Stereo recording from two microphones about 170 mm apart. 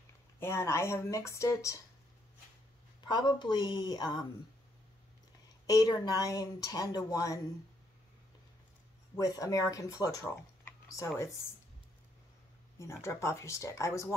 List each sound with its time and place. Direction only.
0.4 s speech: 15° left (ahead or behind)
3.1 s speech: 25° left (ahead or behind)
5.7 s speech: 20° left (ahead or behind)
9.1 s speech: 20° left (ahead or behind)
10.2 s computer keyboard: 15° left (ahead or behind)
13.0 s speech: 15° left (ahead or behind)